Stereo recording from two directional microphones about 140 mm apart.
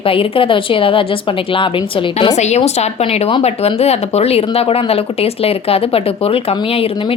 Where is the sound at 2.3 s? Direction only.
55° left (ahead or behind).